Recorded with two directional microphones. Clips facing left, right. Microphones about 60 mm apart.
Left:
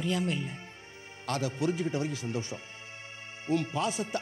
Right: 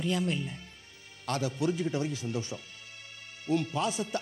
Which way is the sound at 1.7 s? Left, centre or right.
Left.